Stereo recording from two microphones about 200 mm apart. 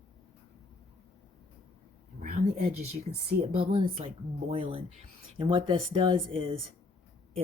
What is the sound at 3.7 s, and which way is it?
Speech, 25° right (ahead or behind).